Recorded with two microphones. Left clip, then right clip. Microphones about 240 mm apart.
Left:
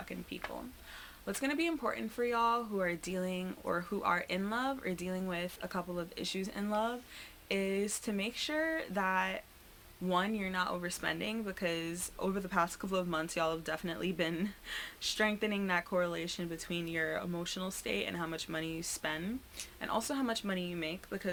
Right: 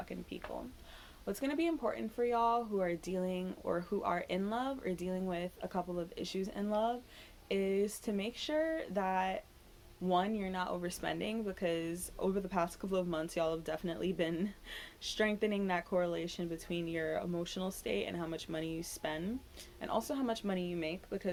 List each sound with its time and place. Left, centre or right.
0.1 s speech: left